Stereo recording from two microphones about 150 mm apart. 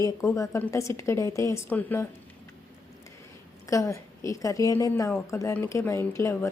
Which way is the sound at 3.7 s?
20° left (ahead or behind).